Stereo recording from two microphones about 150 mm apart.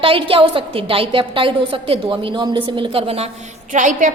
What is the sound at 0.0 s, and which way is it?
A woman's voice, 35° right (ahead or behind).